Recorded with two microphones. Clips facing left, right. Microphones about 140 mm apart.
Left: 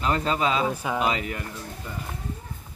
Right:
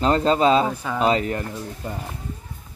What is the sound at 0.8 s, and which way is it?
Speech, 10° left (ahead or behind).